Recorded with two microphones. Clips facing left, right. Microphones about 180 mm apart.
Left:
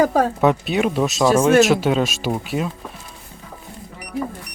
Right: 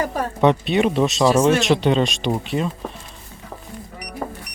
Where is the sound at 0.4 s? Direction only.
Centre (ahead or behind).